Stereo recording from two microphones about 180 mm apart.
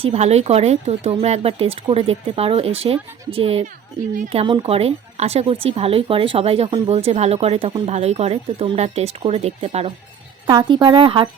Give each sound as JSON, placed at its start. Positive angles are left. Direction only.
{"t": 0.0, "sound": "speech", "side_deg": -35}
{"t": 10.4, "sound": "a woman's voice", "side_deg": -25}